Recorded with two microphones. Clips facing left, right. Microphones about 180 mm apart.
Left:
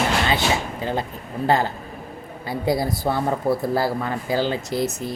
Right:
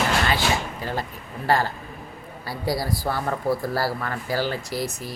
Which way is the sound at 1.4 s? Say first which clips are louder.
Left 2 dB; 20° left (ahead or behind).